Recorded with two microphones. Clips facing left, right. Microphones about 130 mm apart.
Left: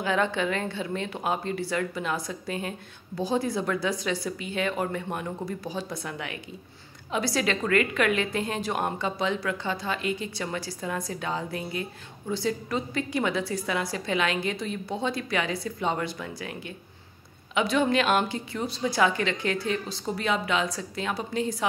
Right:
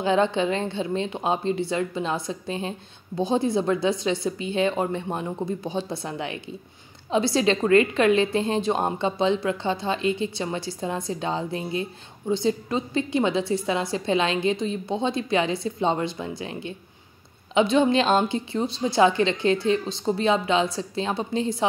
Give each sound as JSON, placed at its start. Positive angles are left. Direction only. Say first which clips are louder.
{"t": 0.0, "sound": "a woman's voice", "louder": "right 5 dB", "side_deg": -25}